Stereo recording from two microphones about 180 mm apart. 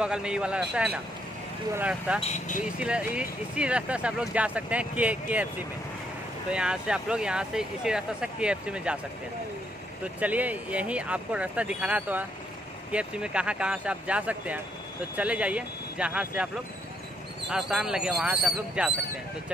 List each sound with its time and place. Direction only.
0.0 s speech: 5° right (ahead or behind)
2.2 s speech: 40° left (ahead or behind)
2.6 s speech: 5° right (ahead or behind)
6.5 s speech: 5° right (ahead or behind)
10.2 s speech: 10° right (ahead or behind)
17.5 s speech: 5° right (ahead or behind)